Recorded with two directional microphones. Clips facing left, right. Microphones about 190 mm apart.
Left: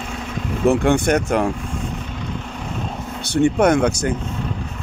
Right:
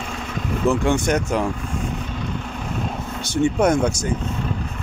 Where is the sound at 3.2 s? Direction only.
60° left (ahead or behind).